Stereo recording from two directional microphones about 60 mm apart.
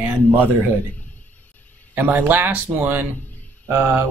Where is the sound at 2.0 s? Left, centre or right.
Right.